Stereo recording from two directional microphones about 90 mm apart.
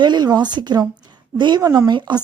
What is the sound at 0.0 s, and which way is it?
Speech, 55° right (ahead or behind).